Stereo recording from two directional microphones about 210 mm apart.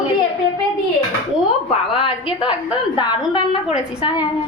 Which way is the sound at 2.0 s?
25° left (ahead or behind).